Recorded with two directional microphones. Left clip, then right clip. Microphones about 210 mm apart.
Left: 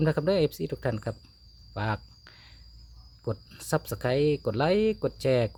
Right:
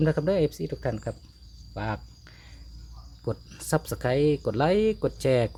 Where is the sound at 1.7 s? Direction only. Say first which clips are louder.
Left 1 dB; 30° left (ahead or behind).